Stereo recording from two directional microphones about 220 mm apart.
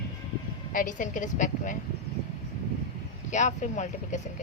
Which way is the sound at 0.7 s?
35° left (ahead or behind).